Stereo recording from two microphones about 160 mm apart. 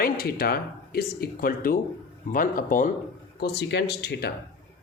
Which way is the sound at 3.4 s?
90° left.